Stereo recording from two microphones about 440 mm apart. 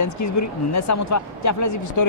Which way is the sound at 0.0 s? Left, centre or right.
Left.